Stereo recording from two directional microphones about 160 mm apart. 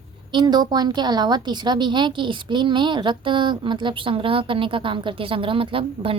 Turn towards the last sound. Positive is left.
turn(degrees=-35)  # may be behind; listen again after turning